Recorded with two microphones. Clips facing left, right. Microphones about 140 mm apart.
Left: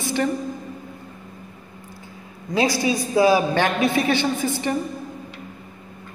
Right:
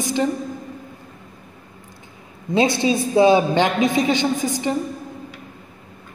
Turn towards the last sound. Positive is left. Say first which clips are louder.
# right 1 dB
turn(degrees=-15)  # may be behind; listen again after turning